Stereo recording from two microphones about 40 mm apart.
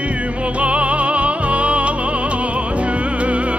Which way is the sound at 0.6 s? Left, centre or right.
Right.